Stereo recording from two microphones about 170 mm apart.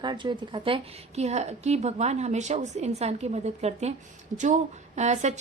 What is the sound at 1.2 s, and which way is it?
A woman's voice, 40° right (ahead or behind).